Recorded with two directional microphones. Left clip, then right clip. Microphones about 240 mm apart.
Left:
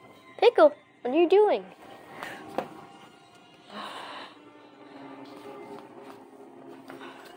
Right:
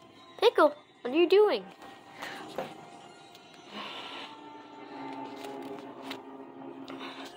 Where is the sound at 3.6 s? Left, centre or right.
Centre.